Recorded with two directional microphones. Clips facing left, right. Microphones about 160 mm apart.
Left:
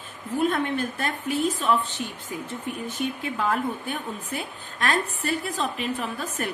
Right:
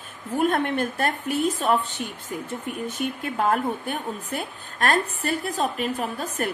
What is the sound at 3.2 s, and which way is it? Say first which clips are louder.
A woman's voice: right 4 dB; 45° right (ahead or behind).